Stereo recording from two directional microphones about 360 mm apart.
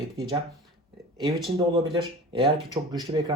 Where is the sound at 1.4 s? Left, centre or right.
Centre.